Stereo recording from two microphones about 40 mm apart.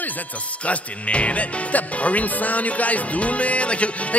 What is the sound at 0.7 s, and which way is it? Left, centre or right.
Speech, left.